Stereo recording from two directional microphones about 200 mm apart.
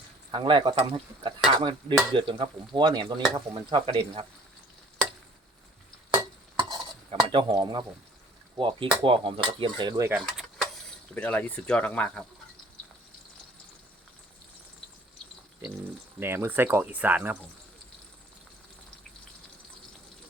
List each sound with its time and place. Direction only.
0.3 s speech: 25° right (ahead or behind)
6.6 s stir: 20° right (ahead or behind)
8.5 s speech: 25° right (ahead or behind)
10.1 s a sound: 5° right (ahead or behind)
11.1 s speech: 5° left (ahead or behind)
16.2 s speech: 10° right (ahead or behind)